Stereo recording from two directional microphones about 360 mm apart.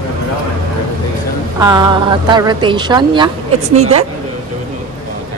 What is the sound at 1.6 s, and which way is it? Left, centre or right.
Speech, centre.